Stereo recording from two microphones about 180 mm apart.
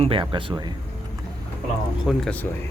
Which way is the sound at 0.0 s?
30° right (ahead or behind).